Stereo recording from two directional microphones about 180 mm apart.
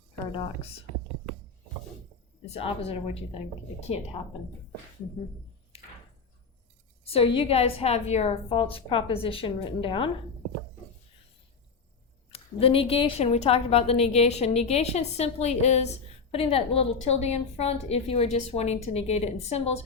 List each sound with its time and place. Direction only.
0.3 s speech: 30° left (ahead or behind)
2.5 s a woman's voice: 35° left (ahead or behind)
7.0 s a sound: 30° left (ahead or behind)
7.3 s a woman's voice: 35° left (ahead or behind)
12.3 s a woman's voice: 30° left (ahead or behind)